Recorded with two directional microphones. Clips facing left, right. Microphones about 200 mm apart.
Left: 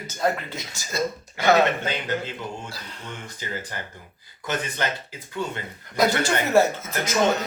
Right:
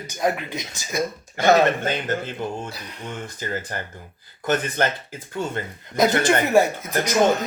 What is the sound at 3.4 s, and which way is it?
Speech, 45° right (ahead or behind).